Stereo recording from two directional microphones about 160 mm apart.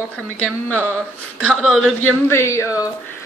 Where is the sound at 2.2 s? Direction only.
15° left (ahead or behind).